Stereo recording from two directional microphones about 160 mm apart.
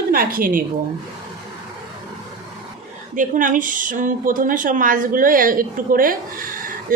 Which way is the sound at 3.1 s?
55° right (ahead or behind).